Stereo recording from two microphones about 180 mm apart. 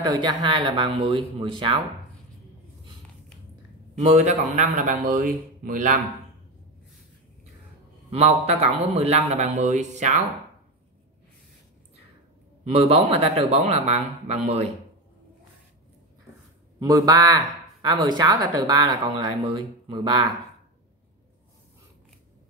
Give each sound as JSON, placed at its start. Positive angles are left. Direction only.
{"t": 0.0, "sound": "speech", "side_deg": -25}
{"t": 4.0, "sound": "speech", "side_deg": -40}
{"t": 8.1, "sound": "a man's voice", "side_deg": -35}
{"t": 12.7, "sound": "a man's voice", "side_deg": -35}
{"t": 16.8, "sound": "speech", "side_deg": -20}